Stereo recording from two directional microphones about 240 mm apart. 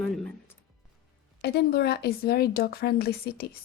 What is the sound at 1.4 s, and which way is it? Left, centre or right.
Speech, left.